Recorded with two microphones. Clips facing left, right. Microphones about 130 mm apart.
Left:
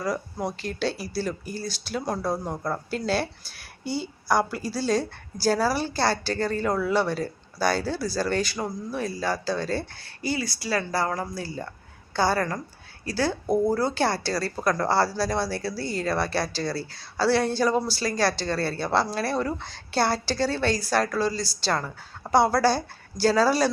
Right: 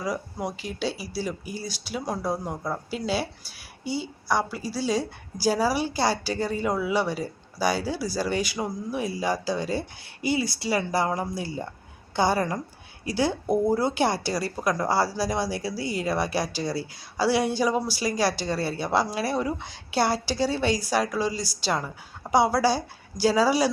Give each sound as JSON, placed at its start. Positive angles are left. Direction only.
{"t": 0.0, "sound": "speech", "side_deg": -10}